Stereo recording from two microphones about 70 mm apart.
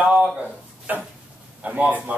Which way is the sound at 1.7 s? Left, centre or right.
Centre.